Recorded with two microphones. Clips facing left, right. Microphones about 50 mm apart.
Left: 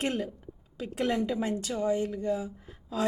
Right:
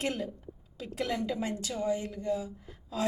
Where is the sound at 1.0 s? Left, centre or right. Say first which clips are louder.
Left 4 dB; left.